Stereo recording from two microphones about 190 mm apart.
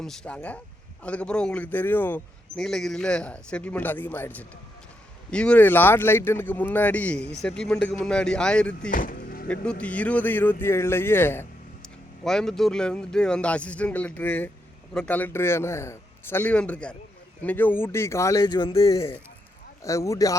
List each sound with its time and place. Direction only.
0.0 s speech: 5° left (ahead or behind)
8.9 s vehicle: 45° left (ahead or behind)
9.5 s speech: 5° left (ahead or behind)